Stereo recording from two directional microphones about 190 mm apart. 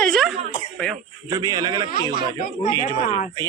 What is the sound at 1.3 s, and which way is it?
Speech, 20° right (ahead or behind).